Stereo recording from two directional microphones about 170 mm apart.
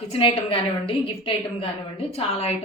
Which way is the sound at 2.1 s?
35° left (ahead or behind).